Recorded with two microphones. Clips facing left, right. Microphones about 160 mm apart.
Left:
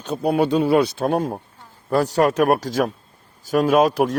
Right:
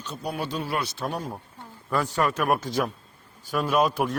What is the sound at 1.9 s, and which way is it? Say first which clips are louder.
A man's voice: left 7 dB; 40° left (ahead or behind).